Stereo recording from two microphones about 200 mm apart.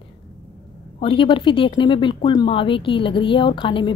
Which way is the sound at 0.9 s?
25° left (ahead or behind).